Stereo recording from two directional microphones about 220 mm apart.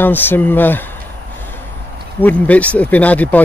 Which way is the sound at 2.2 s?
5° left (ahead or behind).